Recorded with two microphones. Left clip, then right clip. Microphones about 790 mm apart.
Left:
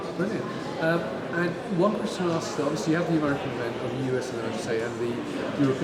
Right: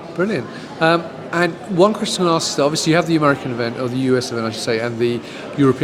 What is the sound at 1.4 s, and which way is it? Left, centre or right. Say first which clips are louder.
A man's voice: right 11 dB; right.